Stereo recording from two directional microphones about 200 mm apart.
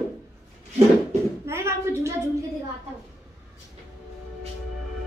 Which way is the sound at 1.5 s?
15° right (ahead or behind).